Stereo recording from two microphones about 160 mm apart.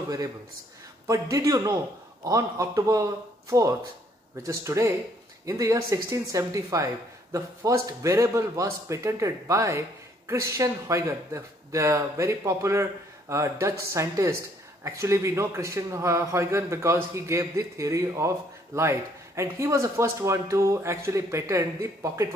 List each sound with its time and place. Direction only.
1.0 s a man's voice: 20° right (ahead or behind)